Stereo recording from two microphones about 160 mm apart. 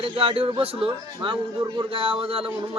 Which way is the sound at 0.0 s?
35° right (ahead or behind).